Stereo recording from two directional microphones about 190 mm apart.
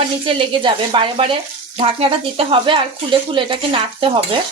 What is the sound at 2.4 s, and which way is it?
A woman's voice, 25° right (ahead or behind).